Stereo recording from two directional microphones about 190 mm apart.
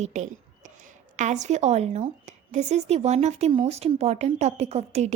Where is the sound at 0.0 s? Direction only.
40° right (ahead or behind).